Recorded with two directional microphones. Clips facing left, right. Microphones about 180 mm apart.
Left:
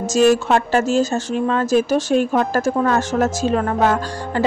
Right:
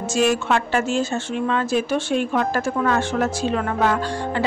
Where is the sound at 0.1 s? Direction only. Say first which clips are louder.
Left 5 dB; 40° left (ahead or behind).